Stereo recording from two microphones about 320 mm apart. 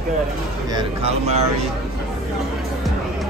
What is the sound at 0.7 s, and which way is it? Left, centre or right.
Speech, centre.